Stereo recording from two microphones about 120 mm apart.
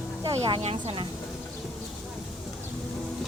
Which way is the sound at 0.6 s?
50° right (ahead or behind).